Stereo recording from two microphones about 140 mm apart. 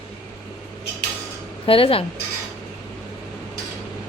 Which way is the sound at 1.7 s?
40° left (ahead or behind).